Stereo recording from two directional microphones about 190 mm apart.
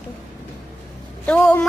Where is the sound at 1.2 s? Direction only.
5° left (ahead or behind).